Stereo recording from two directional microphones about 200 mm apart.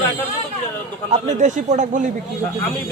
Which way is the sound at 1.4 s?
40° right (ahead or behind).